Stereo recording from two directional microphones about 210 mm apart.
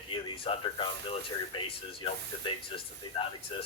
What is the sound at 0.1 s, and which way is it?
Speech, 25° left (ahead or behind).